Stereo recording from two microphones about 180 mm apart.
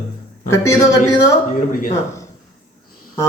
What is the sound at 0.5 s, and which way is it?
Speech, 15° left (ahead or behind).